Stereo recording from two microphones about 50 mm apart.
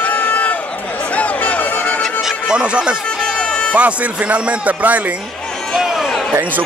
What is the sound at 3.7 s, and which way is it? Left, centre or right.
Speech, right.